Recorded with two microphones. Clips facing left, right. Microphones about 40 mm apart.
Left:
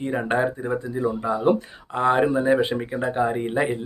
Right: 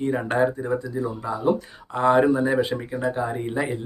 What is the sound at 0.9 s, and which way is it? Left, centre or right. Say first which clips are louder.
Speech: left 3 dB; left.